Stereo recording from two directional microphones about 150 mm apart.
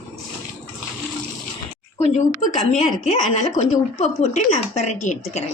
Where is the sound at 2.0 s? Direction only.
50° left (ahead or behind).